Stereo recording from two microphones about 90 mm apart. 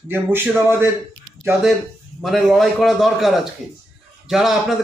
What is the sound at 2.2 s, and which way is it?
Speech, centre (ahead or behind).